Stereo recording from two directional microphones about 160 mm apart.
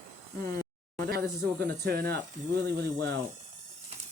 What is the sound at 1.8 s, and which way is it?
Speech, 75° right (ahead or behind).